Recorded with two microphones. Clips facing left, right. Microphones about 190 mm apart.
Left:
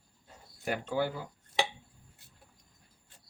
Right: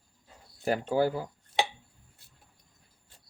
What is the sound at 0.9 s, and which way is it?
Speech, 35° right (ahead or behind).